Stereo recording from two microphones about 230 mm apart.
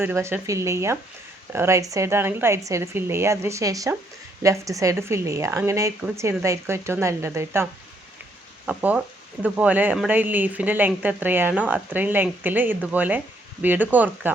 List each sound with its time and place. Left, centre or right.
0.0 s speech: centre